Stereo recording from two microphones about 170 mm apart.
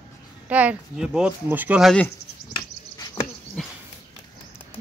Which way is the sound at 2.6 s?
20° left (ahead or behind).